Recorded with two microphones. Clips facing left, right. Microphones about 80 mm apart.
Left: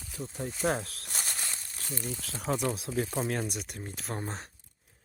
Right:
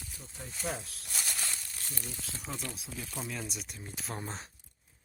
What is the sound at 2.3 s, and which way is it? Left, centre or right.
Speech, left.